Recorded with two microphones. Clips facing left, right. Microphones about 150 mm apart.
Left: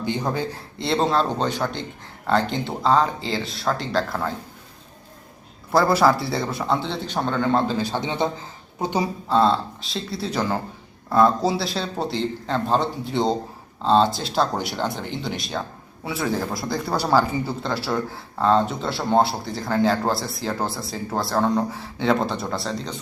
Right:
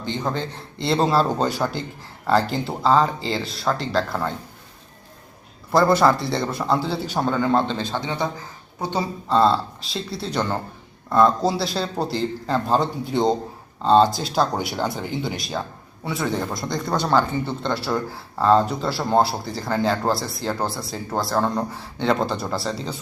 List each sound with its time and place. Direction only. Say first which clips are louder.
0.0 s a man's voice: left 1 dB; 10° left (ahead or behind)
0.8 s speech: right 2 dB; centre (ahead or behind)
5.7 s speech: right 1 dB; centre (ahead or behind)
7.8 s a man's voice: left 2 dB; 15° left (ahead or behind)
9.3 s speech: right 1 dB; centre (ahead or behind)